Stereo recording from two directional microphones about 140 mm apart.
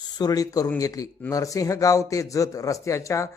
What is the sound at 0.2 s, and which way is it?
Speech, 25° left (ahead or behind).